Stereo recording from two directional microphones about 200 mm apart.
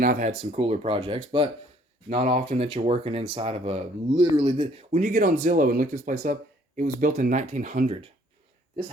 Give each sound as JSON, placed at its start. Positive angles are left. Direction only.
{"t": 0.0, "sound": "speech", "side_deg": -40}
{"t": 4.9, "sound": "speech", "side_deg": -40}